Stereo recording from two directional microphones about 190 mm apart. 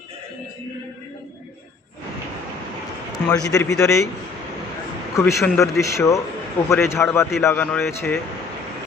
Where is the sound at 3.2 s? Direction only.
15° left (ahead or behind).